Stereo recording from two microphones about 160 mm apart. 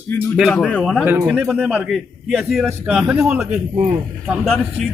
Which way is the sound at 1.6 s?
5° right (ahead or behind).